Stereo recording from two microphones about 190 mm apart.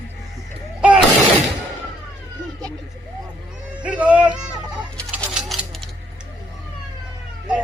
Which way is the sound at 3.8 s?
5° right (ahead or behind).